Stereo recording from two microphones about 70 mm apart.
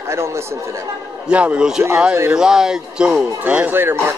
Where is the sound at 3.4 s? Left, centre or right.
Right.